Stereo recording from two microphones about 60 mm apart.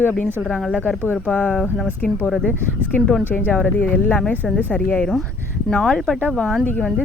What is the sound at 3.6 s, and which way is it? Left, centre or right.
Speech, left.